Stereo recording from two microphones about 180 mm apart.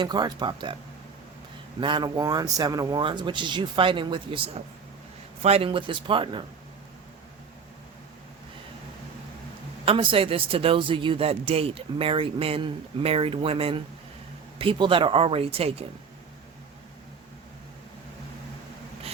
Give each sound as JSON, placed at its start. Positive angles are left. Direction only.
{"t": 0.0, "sound": "speech", "side_deg": -25}
{"t": 1.8, "sound": "speech", "side_deg": -25}
{"t": 9.8, "sound": "speech", "side_deg": -30}